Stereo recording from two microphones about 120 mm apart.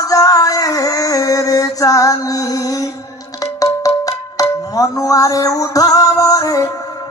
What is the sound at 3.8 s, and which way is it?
Music, 30° left (ahead or behind).